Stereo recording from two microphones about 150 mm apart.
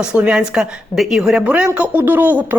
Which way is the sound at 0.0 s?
5° right (ahead or behind).